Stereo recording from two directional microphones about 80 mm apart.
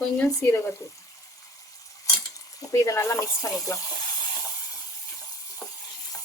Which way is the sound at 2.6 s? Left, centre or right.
Left.